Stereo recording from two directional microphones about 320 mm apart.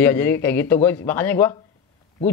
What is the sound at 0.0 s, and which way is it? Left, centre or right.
Speech, centre.